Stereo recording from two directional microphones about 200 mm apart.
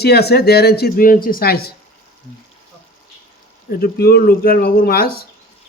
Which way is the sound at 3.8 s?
50° left (ahead or behind).